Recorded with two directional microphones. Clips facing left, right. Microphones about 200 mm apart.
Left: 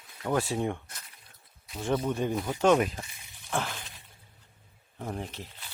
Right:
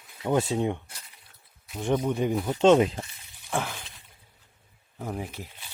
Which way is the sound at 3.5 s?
5° right (ahead or behind).